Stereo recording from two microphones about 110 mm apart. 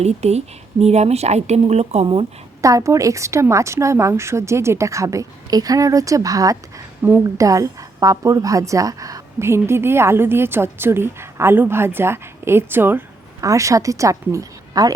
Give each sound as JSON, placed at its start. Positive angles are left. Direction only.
{"t": 0.0, "sound": "speech", "side_deg": -75}
{"t": 2.6, "sound": "a woman's voice", "side_deg": -30}
{"t": 13.4, "sound": "a woman's voice", "side_deg": -30}